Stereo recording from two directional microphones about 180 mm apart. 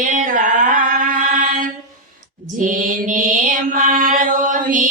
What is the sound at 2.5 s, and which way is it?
Mantra, 50° right (ahead or behind).